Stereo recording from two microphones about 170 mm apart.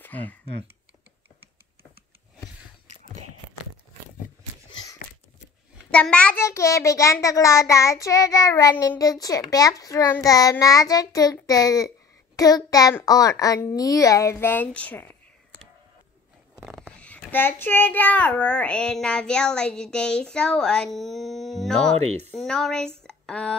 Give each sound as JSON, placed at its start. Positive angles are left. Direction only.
{"t": 0.0, "sound": "speech", "side_deg": 10}
{"t": 5.9, "sound": "a child's voice", "side_deg": 5}
{"t": 17.0, "sound": "a child's voice", "side_deg": 10}
{"t": 21.9, "sound": "speech", "side_deg": -40}
{"t": 22.4, "sound": "speech", "side_deg": 5}